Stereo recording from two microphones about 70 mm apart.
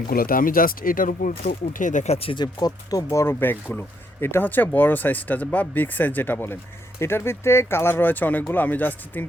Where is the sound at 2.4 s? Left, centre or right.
Left.